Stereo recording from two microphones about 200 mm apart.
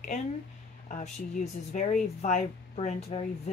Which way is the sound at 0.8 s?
40° left (ahead or behind).